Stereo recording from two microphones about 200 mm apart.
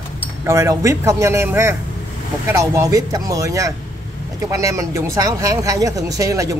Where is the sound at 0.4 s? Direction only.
15° right (ahead or behind).